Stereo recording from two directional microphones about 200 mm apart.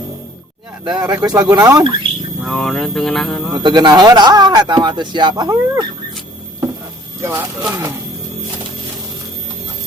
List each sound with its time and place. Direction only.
1.2 s speech: 20° right (ahead or behind)
2.4 s speech: centre (ahead or behind)
3.6 s speech: 20° right (ahead or behind)
7.2 s speech: 10° right (ahead or behind)